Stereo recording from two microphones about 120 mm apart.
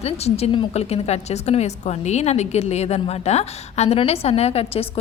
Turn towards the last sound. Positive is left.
turn(degrees=60)  # may be behind; listen again after turning